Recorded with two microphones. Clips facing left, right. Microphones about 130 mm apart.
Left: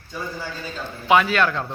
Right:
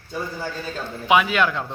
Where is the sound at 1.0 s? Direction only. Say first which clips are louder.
Left 1 dB; 10° right (ahead or behind).